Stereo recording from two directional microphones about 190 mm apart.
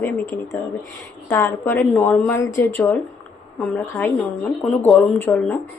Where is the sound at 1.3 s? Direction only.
10° left (ahead or behind).